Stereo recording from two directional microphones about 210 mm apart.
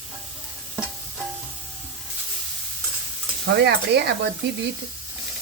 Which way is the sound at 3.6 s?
50° right (ahead or behind).